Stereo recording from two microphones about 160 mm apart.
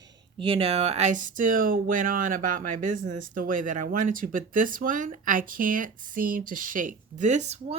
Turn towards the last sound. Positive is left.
turn(degrees=-45)  # may be behind; listen again after turning